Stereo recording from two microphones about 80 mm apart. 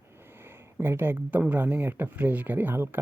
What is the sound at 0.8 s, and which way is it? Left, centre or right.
Speech, right.